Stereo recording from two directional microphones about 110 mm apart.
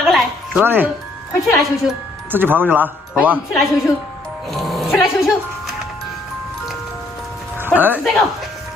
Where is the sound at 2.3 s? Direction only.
20° right (ahead or behind).